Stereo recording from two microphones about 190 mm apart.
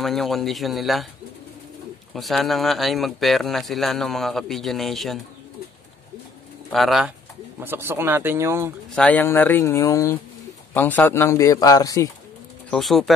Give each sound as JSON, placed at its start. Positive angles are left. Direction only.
{"t": 0.0, "sound": "speech", "side_deg": 0}
{"t": 2.1, "sound": "speech", "side_deg": 0}
{"t": 6.7, "sound": "speech", "side_deg": 0}
{"t": 7.6, "sound": "speech", "side_deg": -10}
{"t": 8.9, "sound": "a man's voice", "side_deg": 5}
{"t": 12.7, "sound": "speech", "side_deg": 0}